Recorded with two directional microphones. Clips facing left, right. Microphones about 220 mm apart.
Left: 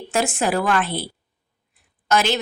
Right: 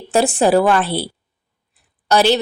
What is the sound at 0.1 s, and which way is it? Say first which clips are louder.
Speech: right 7 dB; 35° right (ahead or behind).